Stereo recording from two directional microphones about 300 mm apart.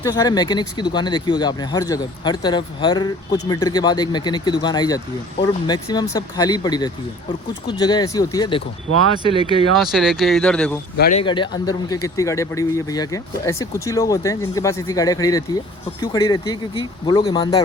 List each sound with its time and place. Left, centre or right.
0.0 s speech: centre
9.7 s speech: centre
10.9 s speech: left
11.2 s speech: centre